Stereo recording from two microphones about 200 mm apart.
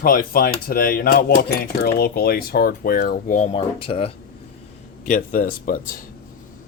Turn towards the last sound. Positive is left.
turn(degrees=45)  # may be behind; listen again after turning